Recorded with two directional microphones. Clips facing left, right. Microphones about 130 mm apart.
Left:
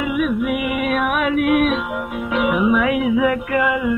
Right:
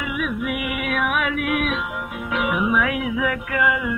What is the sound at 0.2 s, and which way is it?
Music, 30° left (ahead or behind).